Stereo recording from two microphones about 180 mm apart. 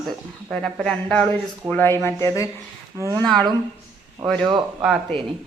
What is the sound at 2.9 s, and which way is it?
Speech, 15° right (ahead or behind).